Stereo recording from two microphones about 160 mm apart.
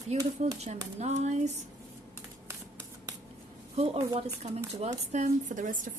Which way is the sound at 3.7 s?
40° right (ahead or behind).